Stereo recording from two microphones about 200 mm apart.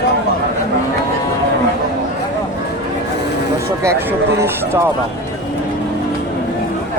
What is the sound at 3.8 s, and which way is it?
Speech, 15° right (ahead or behind).